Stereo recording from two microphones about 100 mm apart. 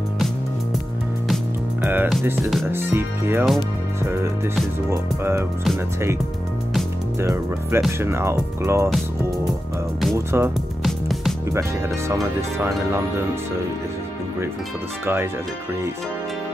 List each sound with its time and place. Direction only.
1.8 s music: 20° right (ahead or behind)
2.7 s speech: 20° right (ahead or behind)
4.8 s speech: 25° right (ahead or behind)
7.2 s speech: 25° right (ahead or behind)
10.1 s speech: 25° right (ahead or behind)
10.8 s music: centre (ahead or behind)
12.1 s speech: 25° right (ahead or behind)